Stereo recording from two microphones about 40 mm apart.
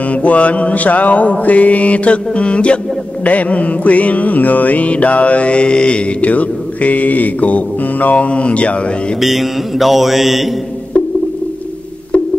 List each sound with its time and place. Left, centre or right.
0.1 s mantra: left
6.2 s mantra: left
9.2 s mantra: centre